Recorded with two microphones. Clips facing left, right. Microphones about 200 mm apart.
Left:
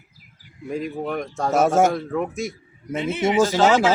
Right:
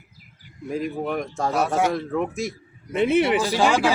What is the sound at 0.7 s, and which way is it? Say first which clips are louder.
Speech: even; centre (ahead or behind).